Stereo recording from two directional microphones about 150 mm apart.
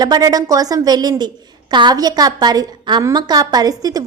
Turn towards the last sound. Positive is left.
turn(degrees=-25)  # may be behind; listen again after turning